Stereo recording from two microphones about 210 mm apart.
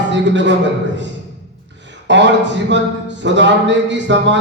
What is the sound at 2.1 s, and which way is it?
Speech, 60° right (ahead or behind).